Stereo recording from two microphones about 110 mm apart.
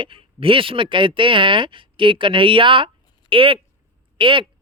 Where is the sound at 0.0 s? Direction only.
55° right (ahead or behind).